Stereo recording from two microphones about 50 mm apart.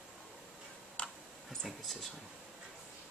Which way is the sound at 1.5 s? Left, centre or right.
Centre.